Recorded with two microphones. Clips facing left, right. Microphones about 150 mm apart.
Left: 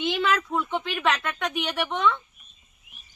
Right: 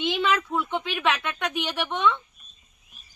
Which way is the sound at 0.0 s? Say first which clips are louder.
Even; centre (ahead or behind).